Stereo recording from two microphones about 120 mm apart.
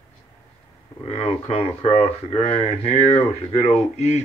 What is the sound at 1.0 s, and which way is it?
Speech, 60° left (ahead or behind).